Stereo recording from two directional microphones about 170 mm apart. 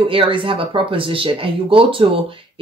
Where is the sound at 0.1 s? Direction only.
30° right (ahead or behind).